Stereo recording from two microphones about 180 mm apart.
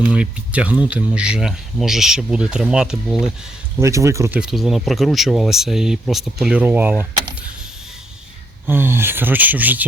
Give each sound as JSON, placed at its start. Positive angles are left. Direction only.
{"t": 0.1, "sound": "speech", "side_deg": -5}
{"t": 3.8, "sound": "speech", "side_deg": -15}
{"t": 4.4, "sound": "speech", "side_deg": 0}
{"t": 8.6, "sound": "speech", "side_deg": -10}